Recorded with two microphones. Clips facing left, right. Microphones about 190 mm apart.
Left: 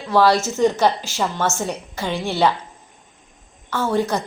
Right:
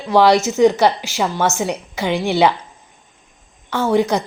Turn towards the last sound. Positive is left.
turn(degrees=-15)  # may be behind; listen again after turning